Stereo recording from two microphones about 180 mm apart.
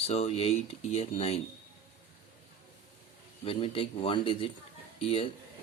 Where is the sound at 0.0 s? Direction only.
35° left (ahead or behind).